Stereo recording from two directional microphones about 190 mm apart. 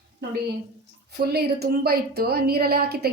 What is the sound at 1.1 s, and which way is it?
A woman's voice, 55° right (ahead or behind).